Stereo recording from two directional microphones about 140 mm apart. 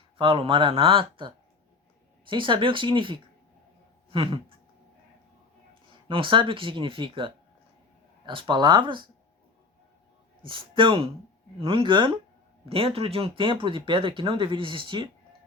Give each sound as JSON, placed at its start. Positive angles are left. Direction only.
{"t": 0.2, "sound": "speech", "side_deg": -40}
{"t": 5.9, "sound": "speech", "side_deg": -40}
{"t": 10.4, "sound": "speech", "side_deg": -35}